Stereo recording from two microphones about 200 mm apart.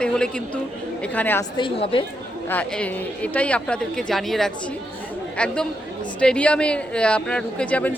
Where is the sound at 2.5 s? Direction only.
5° left (ahead or behind).